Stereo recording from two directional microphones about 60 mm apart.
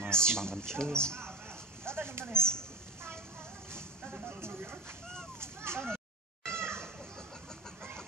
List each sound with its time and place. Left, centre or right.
0.1 s speech: centre
1.9 s speech: right
2.3 s speech: centre
3.7 s speech: right
5.4 s a sound: right
6.4 s cat: right